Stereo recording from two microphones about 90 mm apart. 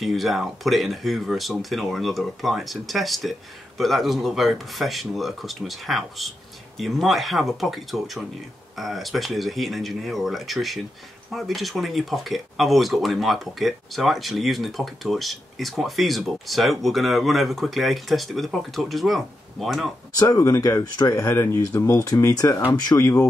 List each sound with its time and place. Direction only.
0.0 s speech: centre (ahead or behind)
20.2 s speech: 35° left (ahead or behind)